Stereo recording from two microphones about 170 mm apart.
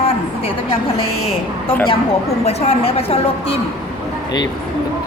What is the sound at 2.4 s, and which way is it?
A woman's voice, 40° left (ahead or behind).